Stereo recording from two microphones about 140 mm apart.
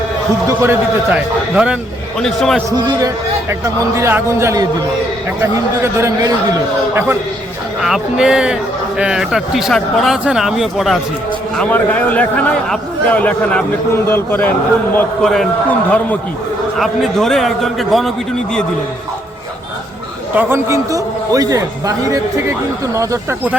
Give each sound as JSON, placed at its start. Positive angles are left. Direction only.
{"t": 0.4, "sound": "a man's voice", "side_deg": -15}
{"t": 2.1, "sound": "speech", "side_deg": 5}
{"t": 2.6, "sound": "a man's voice", "side_deg": -25}
{"t": 7.8, "sound": "speech", "side_deg": -5}
{"t": 11.5, "sound": "a man's voice", "side_deg": 10}
{"t": 14.9, "sound": "speech", "side_deg": 5}
{"t": 16.7, "sound": "speech", "side_deg": 0}
{"t": 20.3, "sound": "a man's voice", "side_deg": -15}